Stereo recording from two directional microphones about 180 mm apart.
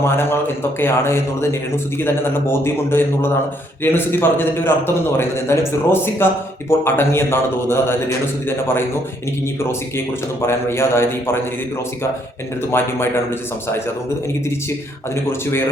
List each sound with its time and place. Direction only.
0.0 s a man's voice: 10° left (ahead or behind)
10.4 s a man's voice: 15° left (ahead or behind)
12.7 s a man's voice: 15° left (ahead or behind)